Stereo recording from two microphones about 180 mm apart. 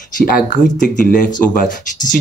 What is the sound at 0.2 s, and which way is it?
Speech, 50° left (ahead or behind).